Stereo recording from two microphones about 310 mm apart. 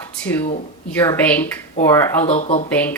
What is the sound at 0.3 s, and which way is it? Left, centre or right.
Speech, centre.